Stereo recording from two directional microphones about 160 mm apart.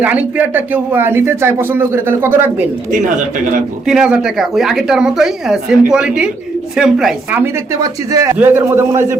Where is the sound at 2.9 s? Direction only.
55° right (ahead or behind).